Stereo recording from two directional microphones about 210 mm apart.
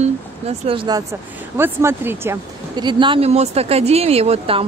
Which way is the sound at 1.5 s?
10° right (ahead or behind).